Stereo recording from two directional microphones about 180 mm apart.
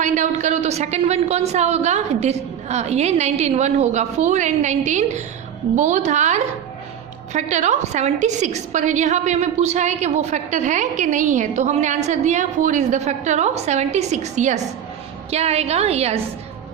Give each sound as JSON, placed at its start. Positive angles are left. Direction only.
{"t": 0.0, "sound": "a woman's voice", "side_deg": -40}